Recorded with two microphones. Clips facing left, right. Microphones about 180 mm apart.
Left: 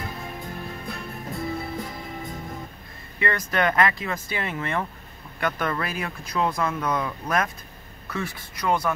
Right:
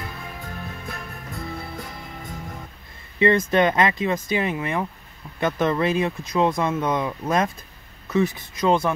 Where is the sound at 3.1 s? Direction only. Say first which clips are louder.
Right 8 dB; 25° right (ahead or behind).